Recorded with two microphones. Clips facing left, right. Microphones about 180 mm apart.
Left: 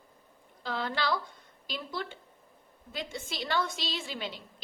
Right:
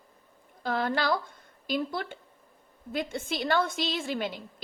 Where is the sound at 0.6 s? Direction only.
50° right (ahead or behind).